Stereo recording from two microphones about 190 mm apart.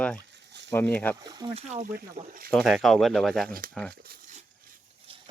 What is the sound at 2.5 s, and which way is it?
Speech, centre (ahead or behind).